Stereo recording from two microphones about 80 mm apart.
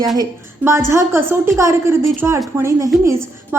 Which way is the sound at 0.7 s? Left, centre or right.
Right.